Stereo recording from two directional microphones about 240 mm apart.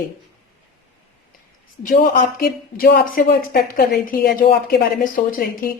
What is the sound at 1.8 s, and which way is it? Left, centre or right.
Speech, left.